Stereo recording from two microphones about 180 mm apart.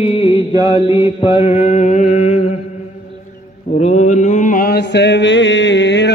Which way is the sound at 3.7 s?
40° left (ahead or behind).